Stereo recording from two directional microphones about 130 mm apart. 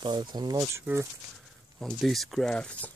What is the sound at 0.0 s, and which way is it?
Speech, 35° right (ahead or behind).